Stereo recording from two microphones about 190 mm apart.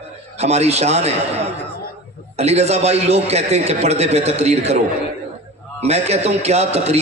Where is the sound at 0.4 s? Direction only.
35° right (ahead or behind).